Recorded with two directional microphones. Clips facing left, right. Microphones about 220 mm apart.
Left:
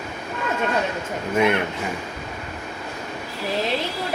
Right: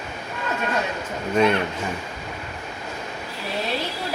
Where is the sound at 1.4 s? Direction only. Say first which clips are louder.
Right 1 dB; 15° left (ahead or behind).